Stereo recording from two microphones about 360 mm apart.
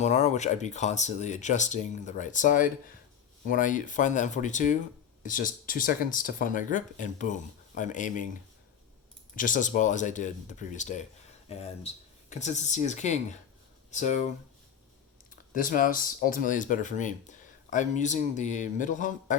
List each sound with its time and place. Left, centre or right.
0.0 s speech: centre
9.3 s speech: left
15.5 s speech: left